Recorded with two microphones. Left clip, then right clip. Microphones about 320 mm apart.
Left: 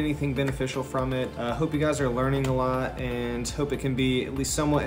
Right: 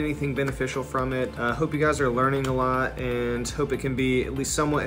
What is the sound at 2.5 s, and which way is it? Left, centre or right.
Speech, left.